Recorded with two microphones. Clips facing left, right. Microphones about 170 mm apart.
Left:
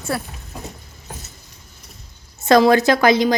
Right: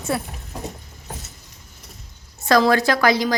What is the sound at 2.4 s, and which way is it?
Speech, 20° left (ahead or behind).